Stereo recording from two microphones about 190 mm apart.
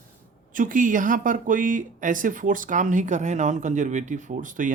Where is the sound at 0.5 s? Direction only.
45° right (ahead or behind).